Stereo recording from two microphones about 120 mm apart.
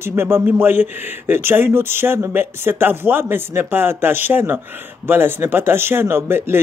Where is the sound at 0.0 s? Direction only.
20° right (ahead or behind).